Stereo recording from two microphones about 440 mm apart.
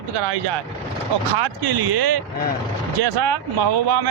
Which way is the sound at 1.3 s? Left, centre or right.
Right.